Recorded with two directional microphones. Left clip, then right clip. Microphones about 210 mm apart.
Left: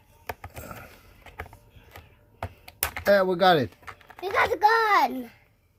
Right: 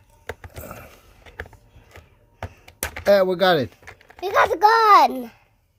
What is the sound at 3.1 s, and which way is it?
Speech, 10° right (ahead or behind).